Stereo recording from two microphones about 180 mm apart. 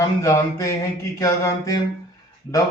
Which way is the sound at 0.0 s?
20° left (ahead or behind).